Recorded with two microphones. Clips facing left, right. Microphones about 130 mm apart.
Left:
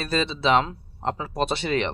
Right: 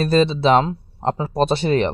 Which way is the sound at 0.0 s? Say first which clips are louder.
Right 8 dB; 40° right (ahead or behind).